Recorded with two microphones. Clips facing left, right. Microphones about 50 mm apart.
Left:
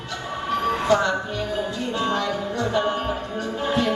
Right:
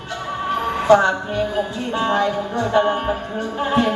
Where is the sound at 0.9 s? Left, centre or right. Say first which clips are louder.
Right 9 dB; right.